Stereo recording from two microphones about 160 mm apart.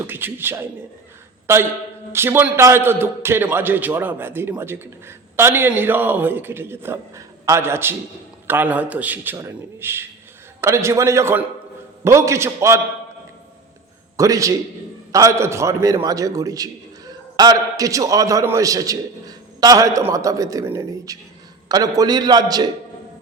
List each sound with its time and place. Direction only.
0.0 s a man's voice: 15° right (ahead or behind)
2.1 s a man's voice: 15° right (ahead or behind)
14.2 s a man's voice: 20° right (ahead or behind)